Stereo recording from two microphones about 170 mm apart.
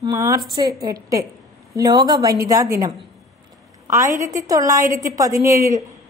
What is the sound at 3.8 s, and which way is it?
A woman's voice, 15° right (ahead or behind).